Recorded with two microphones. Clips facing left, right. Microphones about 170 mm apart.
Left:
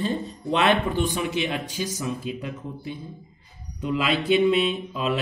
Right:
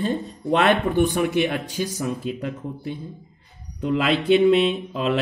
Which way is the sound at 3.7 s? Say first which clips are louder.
Right 3 dB; 55° right (ahead or behind).